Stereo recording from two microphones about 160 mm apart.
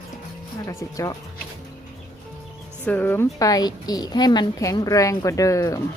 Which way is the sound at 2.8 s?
10° left (ahead or behind).